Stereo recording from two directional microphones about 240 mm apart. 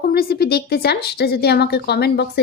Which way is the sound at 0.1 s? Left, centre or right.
Left.